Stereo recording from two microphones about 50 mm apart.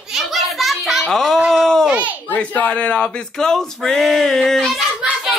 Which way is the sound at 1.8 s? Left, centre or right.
Right.